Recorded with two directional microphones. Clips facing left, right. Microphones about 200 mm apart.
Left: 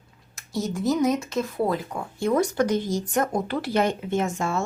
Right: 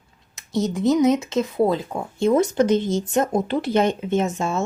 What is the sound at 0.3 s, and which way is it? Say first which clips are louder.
Speech: right 5 dB; 20° right (ahead or behind).